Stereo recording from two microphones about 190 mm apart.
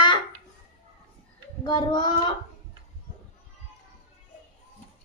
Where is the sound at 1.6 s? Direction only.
20° left (ahead or behind).